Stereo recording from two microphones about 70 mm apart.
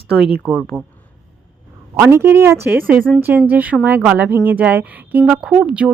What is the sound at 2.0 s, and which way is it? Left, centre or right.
Speech, right.